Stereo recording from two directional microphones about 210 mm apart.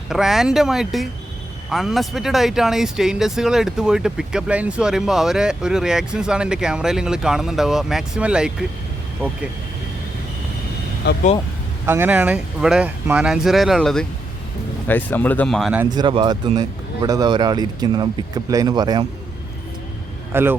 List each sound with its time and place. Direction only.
0.1 s speech: centre (ahead or behind)
11.0 s speech: 50° left (ahead or behind)
11.9 s speech: 10° right (ahead or behind)
15.8 s speech: 20° right (ahead or behind)
20.3 s speech: 10° right (ahead or behind)